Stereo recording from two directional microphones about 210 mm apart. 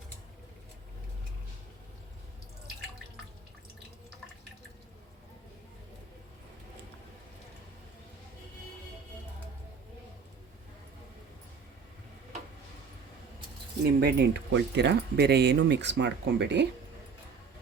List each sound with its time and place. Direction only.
13.8 s speech: 50° right (ahead or behind)